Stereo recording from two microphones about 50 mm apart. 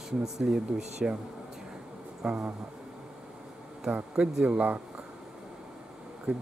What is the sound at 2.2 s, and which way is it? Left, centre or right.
Speech, centre.